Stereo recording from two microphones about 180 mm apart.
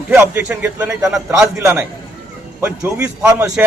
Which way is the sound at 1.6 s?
15° right (ahead or behind).